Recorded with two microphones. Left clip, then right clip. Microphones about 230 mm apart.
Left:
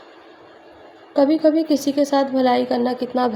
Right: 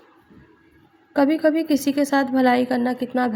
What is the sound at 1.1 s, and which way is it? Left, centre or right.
A woman's voice, right.